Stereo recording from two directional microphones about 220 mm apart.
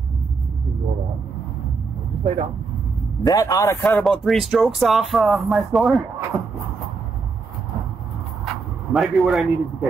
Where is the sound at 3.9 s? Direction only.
Centre (ahead or behind).